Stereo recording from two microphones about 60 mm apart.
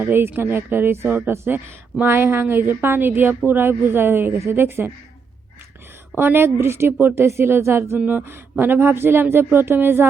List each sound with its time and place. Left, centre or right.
0.0 s a woman's voice: right
6.1 s a woman's voice: right
7.9 s speech: right
8.2 s a woman's voice: right